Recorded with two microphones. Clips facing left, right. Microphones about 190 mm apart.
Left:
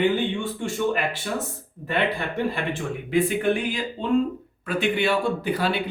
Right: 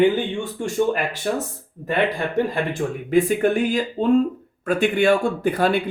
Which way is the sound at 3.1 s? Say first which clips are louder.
Right 4 dB; 45° right (ahead or behind).